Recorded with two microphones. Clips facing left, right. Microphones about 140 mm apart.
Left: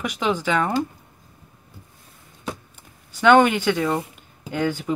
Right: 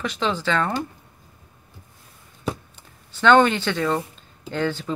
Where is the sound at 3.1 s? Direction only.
10° left (ahead or behind).